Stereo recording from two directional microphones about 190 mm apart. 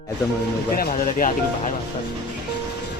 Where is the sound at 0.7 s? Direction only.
50° left (ahead or behind).